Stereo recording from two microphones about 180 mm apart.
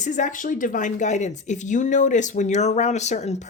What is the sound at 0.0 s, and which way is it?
Speech, 45° left (ahead or behind).